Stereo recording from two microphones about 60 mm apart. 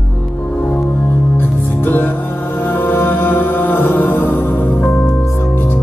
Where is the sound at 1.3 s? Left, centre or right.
Left.